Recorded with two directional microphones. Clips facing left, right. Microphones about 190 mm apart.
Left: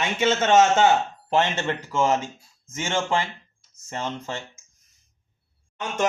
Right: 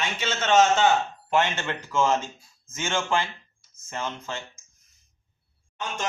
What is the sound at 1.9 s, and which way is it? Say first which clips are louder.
Speech: left 1 dB; 20° left (ahead or behind).